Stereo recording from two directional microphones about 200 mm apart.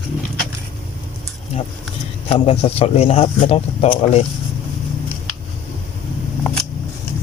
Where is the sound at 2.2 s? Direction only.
30° left (ahead or behind).